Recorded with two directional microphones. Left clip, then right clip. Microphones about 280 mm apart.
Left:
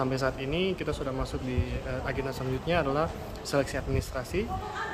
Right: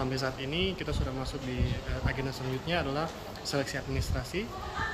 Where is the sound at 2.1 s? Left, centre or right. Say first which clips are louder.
Left 1 dB; centre.